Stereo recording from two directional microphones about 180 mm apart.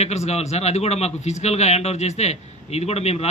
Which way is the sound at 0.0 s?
35° left (ahead or behind).